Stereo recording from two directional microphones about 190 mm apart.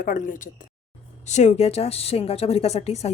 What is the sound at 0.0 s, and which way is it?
A woman's voice, 45° left (ahead or behind).